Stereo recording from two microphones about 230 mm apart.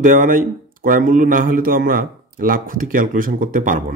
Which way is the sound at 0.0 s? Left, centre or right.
Right.